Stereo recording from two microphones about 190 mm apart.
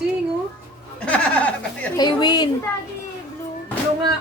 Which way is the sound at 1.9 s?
20° left (ahead or behind).